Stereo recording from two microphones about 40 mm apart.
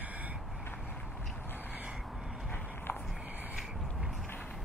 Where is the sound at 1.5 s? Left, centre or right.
Left.